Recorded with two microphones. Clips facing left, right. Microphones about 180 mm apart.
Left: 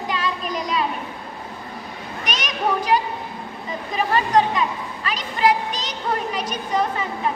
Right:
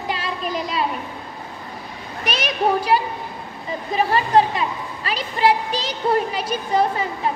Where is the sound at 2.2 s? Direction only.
30° right (ahead or behind).